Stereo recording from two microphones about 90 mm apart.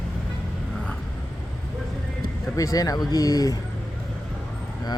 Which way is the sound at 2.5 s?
40° left (ahead or behind).